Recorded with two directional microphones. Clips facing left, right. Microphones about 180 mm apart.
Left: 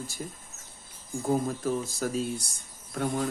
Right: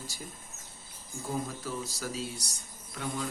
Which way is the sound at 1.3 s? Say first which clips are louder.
Left 8 dB; 50° left (ahead or behind).